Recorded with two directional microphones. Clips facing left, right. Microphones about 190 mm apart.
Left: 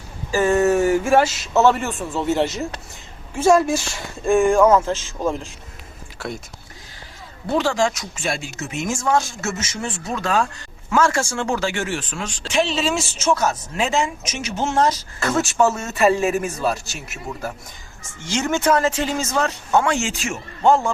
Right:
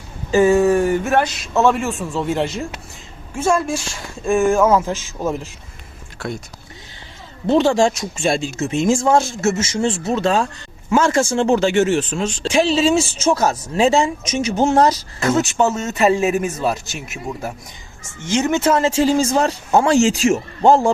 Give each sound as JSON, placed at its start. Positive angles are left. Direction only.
{"t": 0.4, "sound": "a man's voice", "side_deg": 0}
{"t": 7.4, "sound": "speech", "side_deg": -25}
{"t": 15.3, "sound": "speech", "side_deg": -20}
{"t": 18.3, "sound": "speech", "side_deg": -20}